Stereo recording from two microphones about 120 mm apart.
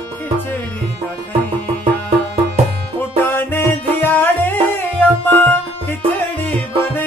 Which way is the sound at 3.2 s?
20° left (ahead or behind).